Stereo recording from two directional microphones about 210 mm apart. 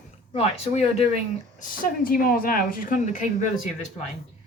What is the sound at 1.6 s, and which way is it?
Speech, 45° left (ahead or behind).